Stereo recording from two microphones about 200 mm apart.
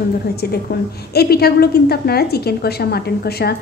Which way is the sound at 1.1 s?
50° left (ahead or behind).